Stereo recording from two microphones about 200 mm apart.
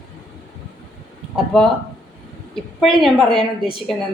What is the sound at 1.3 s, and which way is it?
Speech, centre (ahead or behind).